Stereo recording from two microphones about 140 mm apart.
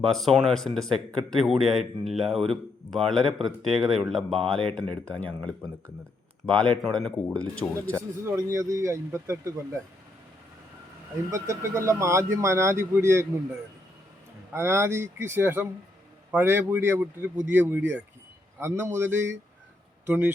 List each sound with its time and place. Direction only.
0.0 s speech: centre (ahead or behind)
6.4 s speech: 5° left (ahead or behind)
8.2 s speech: 20° right (ahead or behind)
11.3 s speech: 20° right (ahead or behind)
14.5 s speech: 15° right (ahead or behind)